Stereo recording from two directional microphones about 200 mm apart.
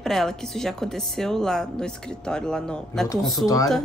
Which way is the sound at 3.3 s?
15° left (ahead or behind).